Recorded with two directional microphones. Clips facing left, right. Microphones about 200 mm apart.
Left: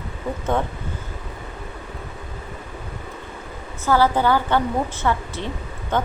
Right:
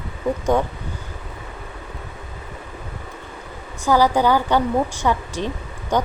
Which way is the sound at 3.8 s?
15° right (ahead or behind).